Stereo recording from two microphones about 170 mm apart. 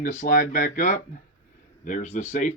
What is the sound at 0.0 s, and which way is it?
Speech, 50° left (ahead or behind).